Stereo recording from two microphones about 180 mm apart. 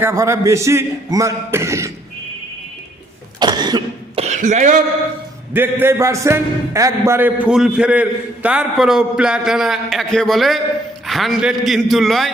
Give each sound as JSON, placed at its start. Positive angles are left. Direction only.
{"t": 0.0, "sound": "a man's voice", "side_deg": -15}
{"t": 3.4, "sound": "cough", "side_deg": -25}
{"t": 4.2, "sound": "cough", "side_deg": -40}
{"t": 5.5, "sound": "a man's voice", "side_deg": -10}